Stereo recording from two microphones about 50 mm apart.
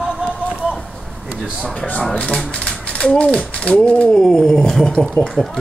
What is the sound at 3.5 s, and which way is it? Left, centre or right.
Speech, left.